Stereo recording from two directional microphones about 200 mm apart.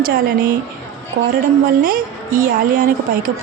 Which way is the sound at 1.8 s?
45° right (ahead or behind).